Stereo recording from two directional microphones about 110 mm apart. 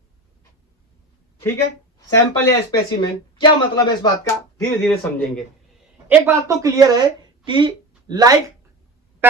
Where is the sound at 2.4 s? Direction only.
25° left (ahead or behind).